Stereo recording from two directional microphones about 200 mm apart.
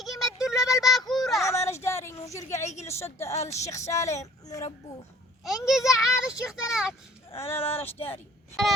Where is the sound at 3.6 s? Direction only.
15° left (ahead or behind).